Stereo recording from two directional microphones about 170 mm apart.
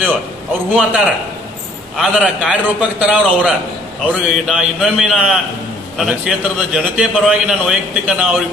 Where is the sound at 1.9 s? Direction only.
5° right (ahead or behind).